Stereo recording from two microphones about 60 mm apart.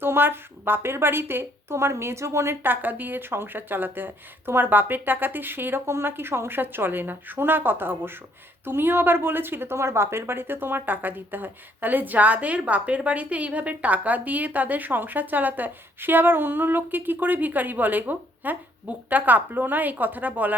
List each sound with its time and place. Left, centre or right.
0.0 s a woman's voice: right
2.6 s a woman's voice: right